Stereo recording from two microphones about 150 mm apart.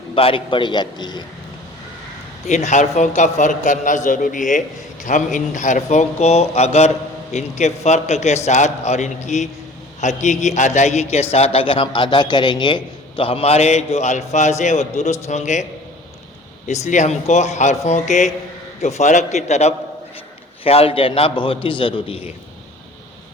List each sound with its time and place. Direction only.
0.1 s a man's voice: 35° left (ahead or behind)
2.5 s a man's voice: 50° left (ahead or behind)
16.6 s a man's voice: 50° left (ahead or behind)